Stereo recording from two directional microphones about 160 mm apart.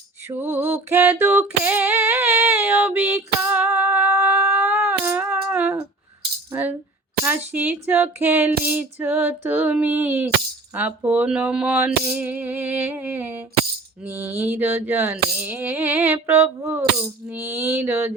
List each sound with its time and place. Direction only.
0.3 s a sound: 15° right (ahead or behind)
6.5 s music: 10° right (ahead or behind)
7.3 s female singing: 10° right (ahead or behind)